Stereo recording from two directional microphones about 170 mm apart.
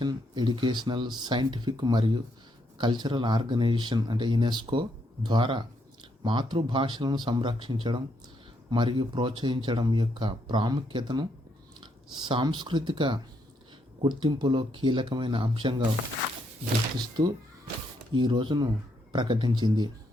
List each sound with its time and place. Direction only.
0.0 s speech: 25° right (ahead or behind)
18.1 s speech: 30° right (ahead or behind)